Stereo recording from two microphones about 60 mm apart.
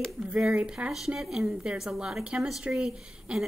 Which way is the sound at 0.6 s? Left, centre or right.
Centre.